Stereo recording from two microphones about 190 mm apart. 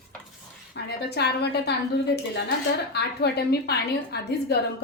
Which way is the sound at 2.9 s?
60° left (ahead or behind).